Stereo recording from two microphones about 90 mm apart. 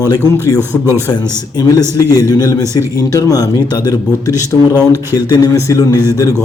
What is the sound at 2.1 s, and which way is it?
A man's voice, 45° left (ahead or behind).